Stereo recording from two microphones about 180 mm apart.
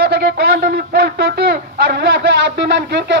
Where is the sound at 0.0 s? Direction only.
60° right (ahead or behind).